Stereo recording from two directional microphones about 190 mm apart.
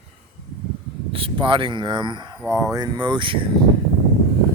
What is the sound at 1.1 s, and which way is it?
Speech, 25° right (ahead or behind).